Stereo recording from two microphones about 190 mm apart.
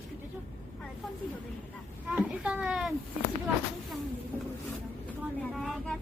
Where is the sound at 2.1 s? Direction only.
5° right (ahead or behind).